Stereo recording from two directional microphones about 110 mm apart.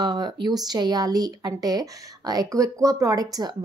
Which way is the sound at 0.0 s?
40° right (ahead or behind).